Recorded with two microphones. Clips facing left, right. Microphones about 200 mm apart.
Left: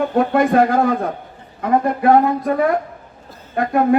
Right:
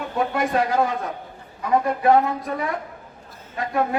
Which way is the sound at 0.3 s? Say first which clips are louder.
Left 6 dB; 55° left (ahead or behind).